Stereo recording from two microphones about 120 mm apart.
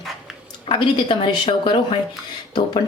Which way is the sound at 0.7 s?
45° left (ahead or behind).